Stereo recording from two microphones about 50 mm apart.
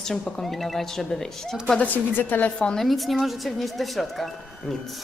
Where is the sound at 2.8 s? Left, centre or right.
Centre.